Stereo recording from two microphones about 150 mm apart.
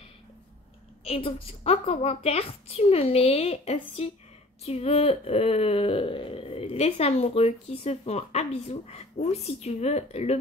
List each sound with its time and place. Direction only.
1.0 s a woman's voice: 40° left (ahead or behind)